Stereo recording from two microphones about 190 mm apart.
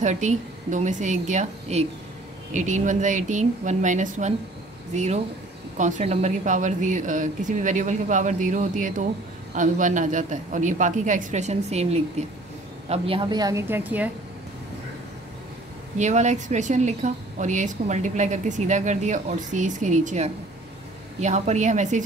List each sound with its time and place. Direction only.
0.0 s a woman's voice: 40° right (ahead or behind); by 14.1 s 10° right (ahead or behind)
16.0 s a woman's voice: 40° right (ahead or behind)